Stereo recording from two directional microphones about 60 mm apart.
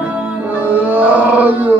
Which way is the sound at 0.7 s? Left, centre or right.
Right.